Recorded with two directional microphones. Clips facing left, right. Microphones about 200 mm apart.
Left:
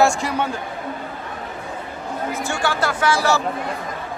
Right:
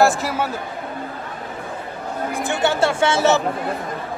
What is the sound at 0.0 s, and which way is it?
Speech, 5° right (ahead or behind).